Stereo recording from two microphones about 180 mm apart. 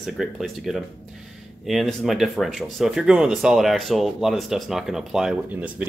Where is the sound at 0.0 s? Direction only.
Centre (ahead or behind).